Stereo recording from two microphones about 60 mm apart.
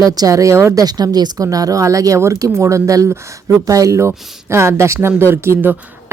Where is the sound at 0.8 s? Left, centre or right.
Right.